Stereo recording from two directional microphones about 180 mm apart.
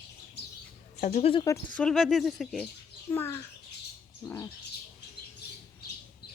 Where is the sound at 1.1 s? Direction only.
30° left (ahead or behind).